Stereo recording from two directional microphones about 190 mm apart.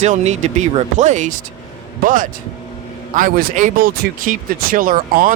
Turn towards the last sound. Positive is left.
turn(degrees=-45)  # may be behind; listen again after turning